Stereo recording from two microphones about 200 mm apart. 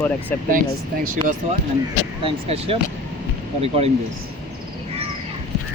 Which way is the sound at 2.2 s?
30° right (ahead or behind).